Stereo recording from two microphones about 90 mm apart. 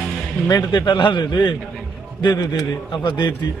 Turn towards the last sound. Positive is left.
turn(degrees=55)  # may be behind; listen again after turning